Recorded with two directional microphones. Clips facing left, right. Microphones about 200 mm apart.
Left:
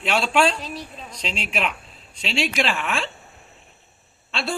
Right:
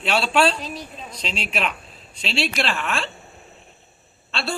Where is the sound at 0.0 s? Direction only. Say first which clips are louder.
Right 1 dB; 15° left (ahead or behind).